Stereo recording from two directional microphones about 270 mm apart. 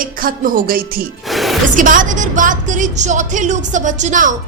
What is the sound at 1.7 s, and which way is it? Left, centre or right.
A woman's voice, right.